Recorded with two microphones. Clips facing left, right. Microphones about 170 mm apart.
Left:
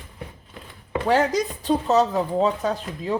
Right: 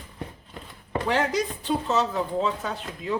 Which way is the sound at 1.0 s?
40° left (ahead or behind).